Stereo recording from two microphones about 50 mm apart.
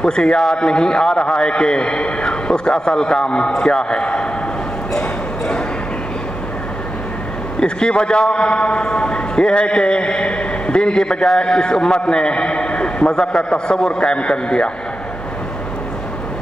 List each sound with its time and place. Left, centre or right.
0.0 s a man's voice: centre
7.6 s a man's voice: centre